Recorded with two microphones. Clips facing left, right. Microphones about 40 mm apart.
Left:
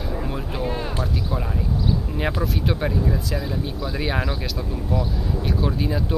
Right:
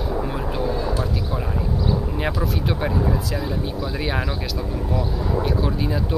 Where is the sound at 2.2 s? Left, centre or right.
Centre.